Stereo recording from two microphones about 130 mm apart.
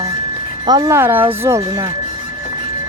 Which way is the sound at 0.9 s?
15° right (ahead or behind).